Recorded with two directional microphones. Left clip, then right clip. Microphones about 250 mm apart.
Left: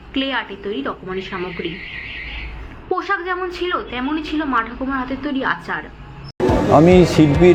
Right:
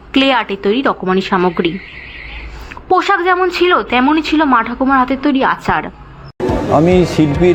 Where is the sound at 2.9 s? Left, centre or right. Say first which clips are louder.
Right 9 dB; right.